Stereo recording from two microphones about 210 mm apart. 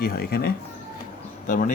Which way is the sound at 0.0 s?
45° left (ahead or behind).